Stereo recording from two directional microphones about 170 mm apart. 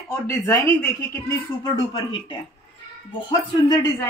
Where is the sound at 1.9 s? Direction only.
30° left (ahead or behind).